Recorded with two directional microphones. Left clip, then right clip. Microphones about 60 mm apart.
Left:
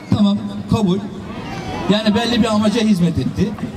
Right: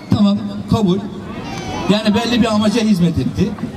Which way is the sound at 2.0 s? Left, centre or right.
Right.